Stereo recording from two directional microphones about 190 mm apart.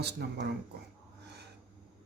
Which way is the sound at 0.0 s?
60° right (ahead or behind).